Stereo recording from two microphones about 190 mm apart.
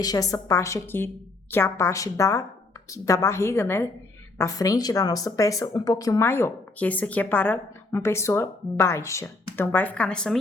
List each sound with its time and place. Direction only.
0.0 s speech: 20° left (ahead or behind)